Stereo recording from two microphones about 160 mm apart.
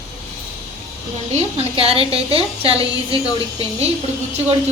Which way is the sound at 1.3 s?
35° right (ahead or behind).